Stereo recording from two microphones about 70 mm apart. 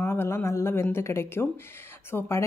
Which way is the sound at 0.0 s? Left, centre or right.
Left.